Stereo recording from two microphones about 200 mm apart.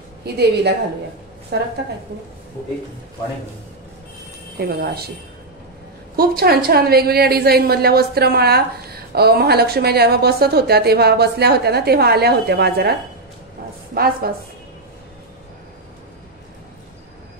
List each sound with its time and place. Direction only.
0.2 s a woman's voice: 55° right (ahead or behind)
4.6 s a woman's voice: 55° right (ahead or behind)
6.1 s a woman's voice: 50° right (ahead or behind)
13.9 s a woman's voice: 50° right (ahead or behind)